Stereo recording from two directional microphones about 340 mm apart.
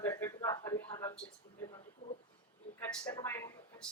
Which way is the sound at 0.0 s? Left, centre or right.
Centre.